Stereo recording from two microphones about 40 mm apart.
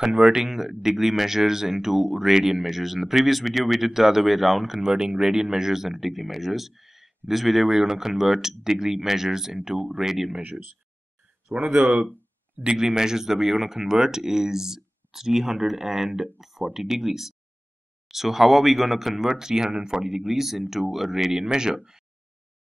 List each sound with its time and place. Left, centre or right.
0.0 s speech: centre
0.5 s speech: centre
11.7 s speech: right